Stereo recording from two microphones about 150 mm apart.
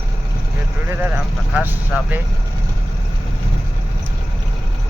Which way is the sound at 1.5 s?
10° right (ahead or behind).